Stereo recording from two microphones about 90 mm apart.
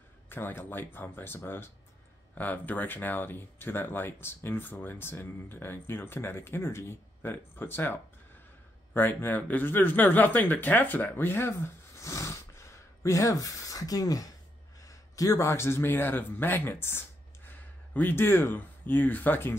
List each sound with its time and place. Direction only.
0.3 s speech: 25° left (ahead or behind)